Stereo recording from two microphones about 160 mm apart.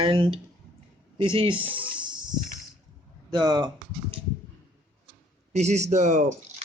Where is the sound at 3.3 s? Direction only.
25° right (ahead or behind).